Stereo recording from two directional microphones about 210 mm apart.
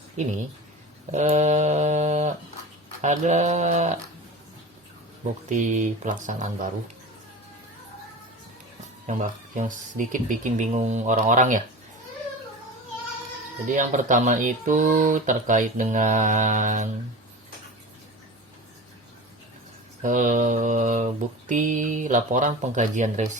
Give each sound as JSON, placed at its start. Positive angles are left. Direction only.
{"t": 0.2, "sound": "mantra", "side_deg": -35}
{"t": 5.5, "sound": "mantra", "side_deg": -35}
{"t": 9.0, "sound": "mantra", "side_deg": -35}
{"t": 13.7, "sound": "mantra", "side_deg": -35}
{"t": 20.0, "sound": "mantra", "side_deg": -40}